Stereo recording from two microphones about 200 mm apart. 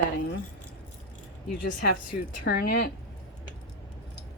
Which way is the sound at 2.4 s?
55° left (ahead or behind).